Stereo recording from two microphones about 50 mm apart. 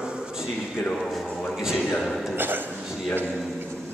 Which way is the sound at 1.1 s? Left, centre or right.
Centre.